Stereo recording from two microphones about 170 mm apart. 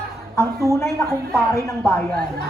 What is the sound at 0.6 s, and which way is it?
Speech, 20° left (ahead or behind).